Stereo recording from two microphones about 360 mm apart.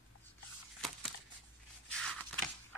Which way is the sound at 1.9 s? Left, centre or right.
Centre.